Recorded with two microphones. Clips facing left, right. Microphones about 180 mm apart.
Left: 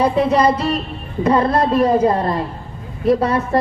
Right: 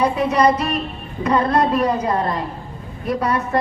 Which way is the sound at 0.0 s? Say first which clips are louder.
Left 2 dB; 30° left (ahead or behind).